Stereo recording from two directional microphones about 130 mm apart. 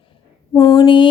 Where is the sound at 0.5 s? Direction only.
30° left (ahead or behind).